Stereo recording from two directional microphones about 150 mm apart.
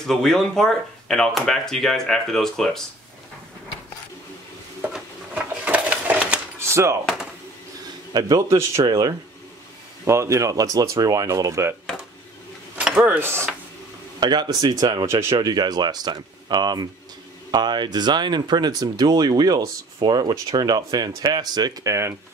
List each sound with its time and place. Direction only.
0.0 s speech: 5° left (ahead or behind)
4.8 s a sound: 10° right (ahead or behind)
6.7 s speech: 20° right (ahead or behind)
8.1 s speech: 25° right (ahead or behind)
11.8 s a sound: 5° left (ahead or behind)
12.7 s speech: 5° right (ahead or behind)
14.2 s speech: 30° right (ahead or behind)